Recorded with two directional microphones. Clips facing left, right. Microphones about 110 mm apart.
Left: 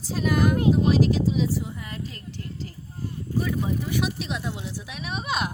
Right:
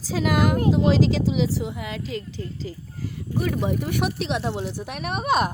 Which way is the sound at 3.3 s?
70° right (ahead or behind).